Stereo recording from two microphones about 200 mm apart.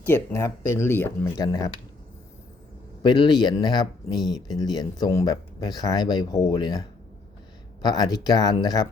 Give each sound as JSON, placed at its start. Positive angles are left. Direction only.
{"t": 0.0, "sound": "speech", "side_deg": 10}
{"t": 3.0, "sound": "speech", "side_deg": 20}